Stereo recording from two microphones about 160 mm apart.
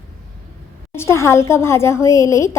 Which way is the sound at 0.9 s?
15° left (ahead or behind).